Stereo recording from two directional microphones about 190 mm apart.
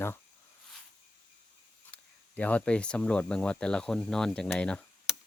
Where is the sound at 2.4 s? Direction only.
5° left (ahead or behind).